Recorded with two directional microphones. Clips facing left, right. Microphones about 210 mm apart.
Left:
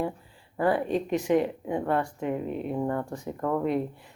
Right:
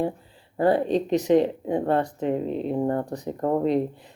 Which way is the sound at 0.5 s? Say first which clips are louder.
Right 4 dB; 25° right (ahead or behind).